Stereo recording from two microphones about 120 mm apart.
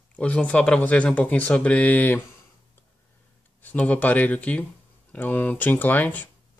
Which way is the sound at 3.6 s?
15° left (ahead or behind).